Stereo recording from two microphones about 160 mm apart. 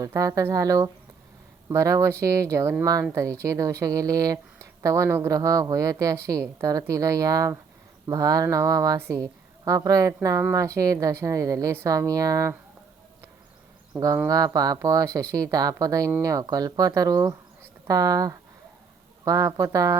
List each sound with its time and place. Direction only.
0.0 s speech: 20° right (ahead or behind)
13.9 s speech: 5° right (ahead or behind)
14.3 s speech: 20° right (ahead or behind)